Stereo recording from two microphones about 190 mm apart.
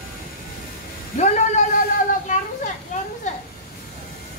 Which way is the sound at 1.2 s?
35° left (ahead or behind).